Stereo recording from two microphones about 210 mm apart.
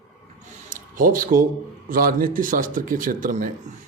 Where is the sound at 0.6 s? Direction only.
40° right (ahead or behind).